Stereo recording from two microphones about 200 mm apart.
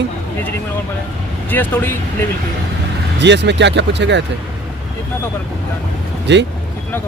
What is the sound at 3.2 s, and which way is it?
Speech, 60° right (ahead or behind).